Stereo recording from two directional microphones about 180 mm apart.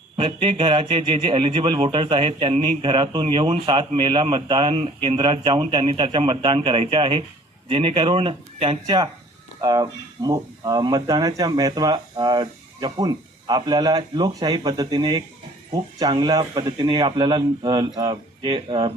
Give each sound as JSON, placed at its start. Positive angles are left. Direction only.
{"t": 0.2, "sound": "a man's voice", "side_deg": -30}